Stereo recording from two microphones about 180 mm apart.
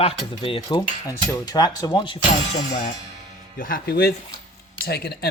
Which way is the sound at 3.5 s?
50° left (ahead or behind).